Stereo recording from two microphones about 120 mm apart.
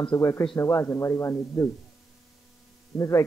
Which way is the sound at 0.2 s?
25° left (ahead or behind).